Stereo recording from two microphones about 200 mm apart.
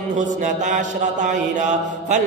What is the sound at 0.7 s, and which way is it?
Speech, 40° right (ahead or behind).